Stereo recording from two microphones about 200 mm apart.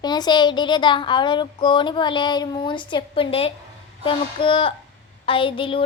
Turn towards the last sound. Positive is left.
turn(degrees=25)  # may be behind; listen again after turning